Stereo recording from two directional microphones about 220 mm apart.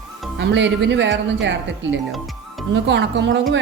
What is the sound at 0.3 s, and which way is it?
Speech, 55° right (ahead or behind).